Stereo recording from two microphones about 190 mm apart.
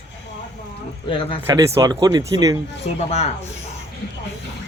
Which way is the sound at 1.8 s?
20° right (ahead or behind).